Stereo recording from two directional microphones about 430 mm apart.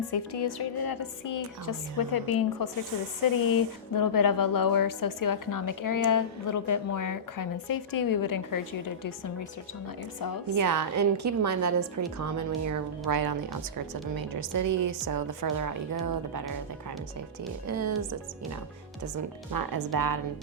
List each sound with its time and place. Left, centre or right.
0.1 s speech: left
10.6 s a woman's voice: right
17.7 s speech: right
19.5 s a woman's voice: right